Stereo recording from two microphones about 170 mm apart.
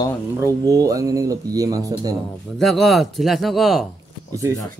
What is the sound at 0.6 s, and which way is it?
Speech, 20° right (ahead or behind).